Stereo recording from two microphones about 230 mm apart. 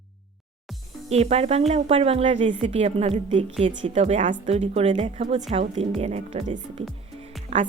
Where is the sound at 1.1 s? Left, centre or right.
Right.